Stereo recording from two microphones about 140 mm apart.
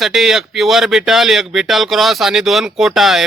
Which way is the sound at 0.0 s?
5° right (ahead or behind).